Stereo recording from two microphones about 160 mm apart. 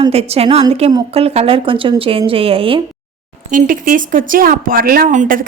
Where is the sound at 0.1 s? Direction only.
40° right (ahead or behind).